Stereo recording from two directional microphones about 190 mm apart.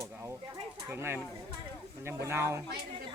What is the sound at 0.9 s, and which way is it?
Speech, 10° right (ahead or behind).